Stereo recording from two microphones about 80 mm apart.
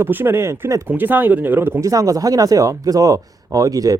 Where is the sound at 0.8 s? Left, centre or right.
Right.